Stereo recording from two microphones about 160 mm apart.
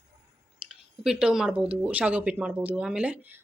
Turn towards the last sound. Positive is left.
turn(degrees=-10)  # may be behind; listen again after turning